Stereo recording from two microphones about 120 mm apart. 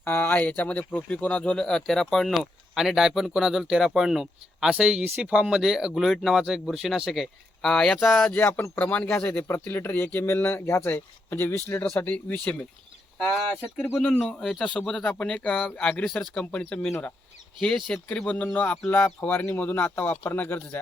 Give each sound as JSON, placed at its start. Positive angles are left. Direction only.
{"t": 0.0, "sound": "speech", "side_deg": 15}